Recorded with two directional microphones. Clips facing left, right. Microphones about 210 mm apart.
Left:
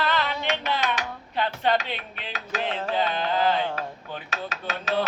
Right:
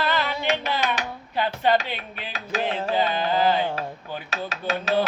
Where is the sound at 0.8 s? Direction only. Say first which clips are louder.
Right 1 dB; 30° right (ahead or behind).